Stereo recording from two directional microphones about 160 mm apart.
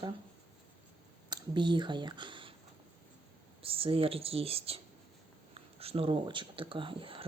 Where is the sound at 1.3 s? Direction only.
30° right (ahead or behind).